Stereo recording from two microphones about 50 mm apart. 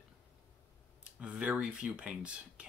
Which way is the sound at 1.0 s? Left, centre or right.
Right.